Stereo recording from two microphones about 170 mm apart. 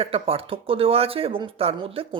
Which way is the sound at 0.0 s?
35° right (ahead or behind).